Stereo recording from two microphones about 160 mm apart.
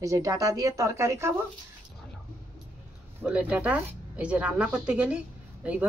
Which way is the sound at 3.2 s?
10° right (ahead or behind).